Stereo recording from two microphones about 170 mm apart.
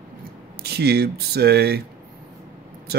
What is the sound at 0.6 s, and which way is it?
Speech, 70° right (ahead or behind).